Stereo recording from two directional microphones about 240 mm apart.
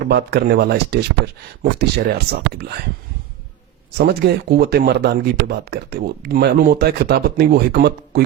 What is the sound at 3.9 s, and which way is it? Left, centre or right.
Speech, right.